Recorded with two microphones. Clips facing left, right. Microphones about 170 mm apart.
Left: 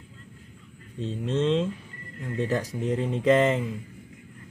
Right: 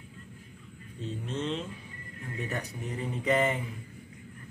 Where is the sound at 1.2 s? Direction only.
90° left.